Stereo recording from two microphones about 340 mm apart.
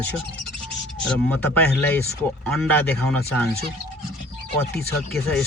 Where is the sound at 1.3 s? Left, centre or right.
Centre.